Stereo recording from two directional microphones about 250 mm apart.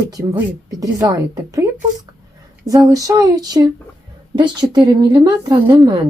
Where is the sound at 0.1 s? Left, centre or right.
Centre.